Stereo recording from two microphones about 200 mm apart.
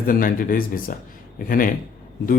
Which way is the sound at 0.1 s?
45° left (ahead or behind).